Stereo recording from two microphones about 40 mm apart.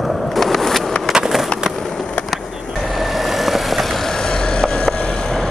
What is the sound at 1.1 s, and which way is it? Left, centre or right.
Skateboard, centre.